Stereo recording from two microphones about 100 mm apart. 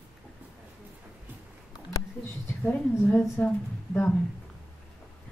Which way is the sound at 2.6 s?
15° left (ahead or behind).